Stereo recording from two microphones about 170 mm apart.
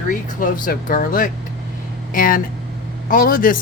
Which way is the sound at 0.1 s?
55° left (ahead or behind).